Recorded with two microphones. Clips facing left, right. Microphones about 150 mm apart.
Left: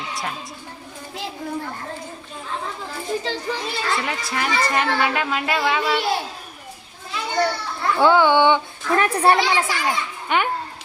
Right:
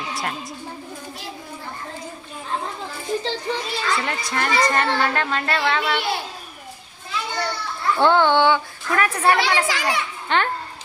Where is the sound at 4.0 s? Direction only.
5° left (ahead or behind).